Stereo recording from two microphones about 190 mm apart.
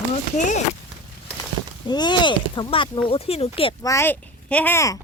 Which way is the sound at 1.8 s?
20° left (ahead or behind).